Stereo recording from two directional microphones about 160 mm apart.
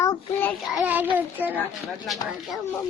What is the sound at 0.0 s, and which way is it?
Child singing, 15° left (ahead or behind).